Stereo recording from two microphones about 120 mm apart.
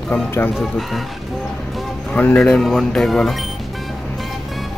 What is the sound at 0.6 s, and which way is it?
Speech, centre (ahead or behind).